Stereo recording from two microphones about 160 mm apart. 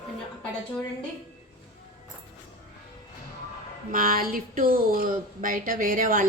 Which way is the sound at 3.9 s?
60° right (ahead or behind).